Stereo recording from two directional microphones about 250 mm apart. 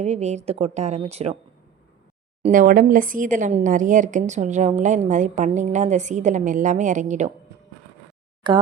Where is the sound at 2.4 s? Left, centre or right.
Right.